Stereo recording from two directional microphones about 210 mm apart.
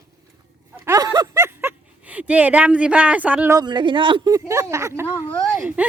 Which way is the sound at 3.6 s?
20° right (ahead or behind).